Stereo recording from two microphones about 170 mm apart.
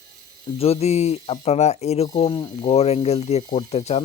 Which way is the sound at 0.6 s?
35° left (ahead or behind).